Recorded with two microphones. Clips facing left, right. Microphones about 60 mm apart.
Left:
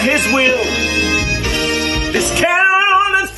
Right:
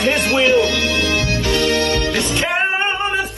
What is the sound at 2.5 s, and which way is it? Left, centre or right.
Music, left.